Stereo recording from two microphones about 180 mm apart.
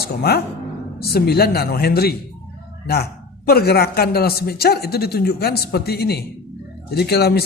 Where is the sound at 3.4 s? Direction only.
60° left (ahead or behind).